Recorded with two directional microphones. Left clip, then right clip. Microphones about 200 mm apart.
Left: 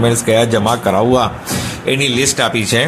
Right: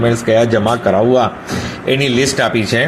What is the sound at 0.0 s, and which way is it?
A man's voice, 10° left (ahead or behind).